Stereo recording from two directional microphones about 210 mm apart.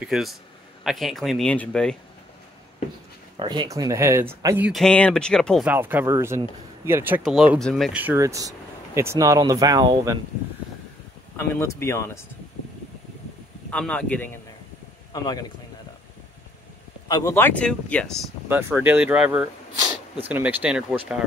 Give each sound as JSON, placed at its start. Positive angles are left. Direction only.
{"t": 0.1, "sound": "speech", "side_deg": 0}
{"t": 3.3, "sound": "speech", "side_deg": -20}
{"t": 4.6, "sound": "speech", "side_deg": 0}
{"t": 5.7, "sound": "speech", "side_deg": -10}
{"t": 11.3, "sound": "speech", "side_deg": 10}
{"t": 13.7, "sound": "speech", "side_deg": 5}
{"t": 15.1, "sound": "speech", "side_deg": 20}
{"t": 17.1, "sound": "speech", "side_deg": 15}
{"t": 18.5, "sound": "speech", "side_deg": -10}